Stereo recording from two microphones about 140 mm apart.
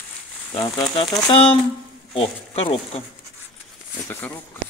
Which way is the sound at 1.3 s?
40° left (ahead or behind).